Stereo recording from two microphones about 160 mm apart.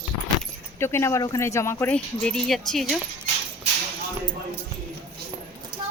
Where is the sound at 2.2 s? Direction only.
5° left (ahead or behind).